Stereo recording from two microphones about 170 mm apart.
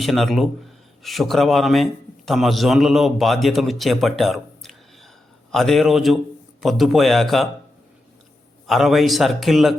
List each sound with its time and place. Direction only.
0.0 s a man's voice: centre (ahead or behind)
8.6 s a man's voice: centre (ahead or behind)